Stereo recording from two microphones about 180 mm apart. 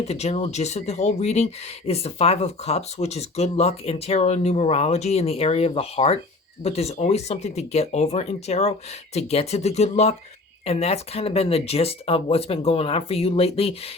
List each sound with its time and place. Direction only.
0.0 s speech: 35° left (ahead or behind)